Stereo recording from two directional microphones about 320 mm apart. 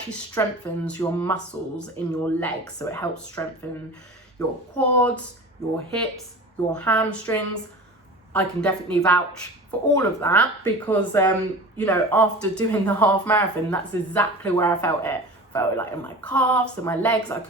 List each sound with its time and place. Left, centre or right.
0.1 s speech: centre
6.7 s speech: centre